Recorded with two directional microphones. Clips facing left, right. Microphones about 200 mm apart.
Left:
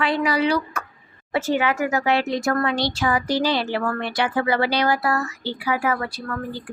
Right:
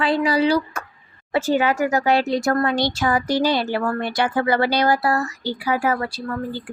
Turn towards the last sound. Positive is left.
turn(degrees=-30)  # may be behind; listen again after turning